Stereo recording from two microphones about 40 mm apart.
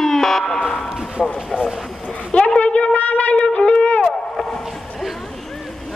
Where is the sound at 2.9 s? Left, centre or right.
Left.